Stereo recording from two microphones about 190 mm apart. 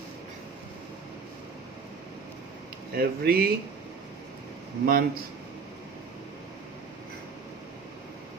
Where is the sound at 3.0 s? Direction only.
50° right (ahead or behind).